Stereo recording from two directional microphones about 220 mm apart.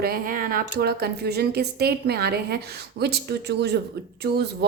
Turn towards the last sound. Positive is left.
turn(degrees=-45)  # may be behind; listen again after turning